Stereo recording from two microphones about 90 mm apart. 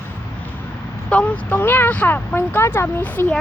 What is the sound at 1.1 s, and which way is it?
Speech, 15° left (ahead or behind).